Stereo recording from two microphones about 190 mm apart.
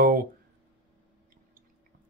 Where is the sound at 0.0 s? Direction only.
50° right (ahead or behind).